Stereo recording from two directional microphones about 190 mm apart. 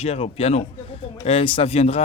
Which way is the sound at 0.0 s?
30° left (ahead or behind).